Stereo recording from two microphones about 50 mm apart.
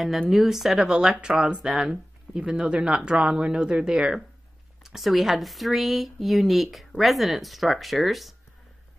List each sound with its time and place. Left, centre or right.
0.3 s speech: centre
4.8 s speech: centre